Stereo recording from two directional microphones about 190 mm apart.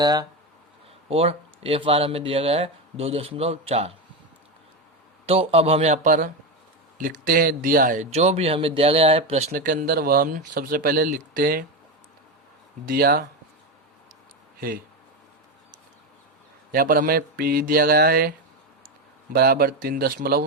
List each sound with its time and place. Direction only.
0.0 s speech: 20° right (ahead or behind)
1.0 s speech: 30° right (ahead or behind)
5.2 s speech: 30° right (ahead or behind)
9.5 s speech: 50° right (ahead or behind)
12.8 s speech: 50° right (ahead or behind)
16.7 s speech: 45° right (ahead or behind)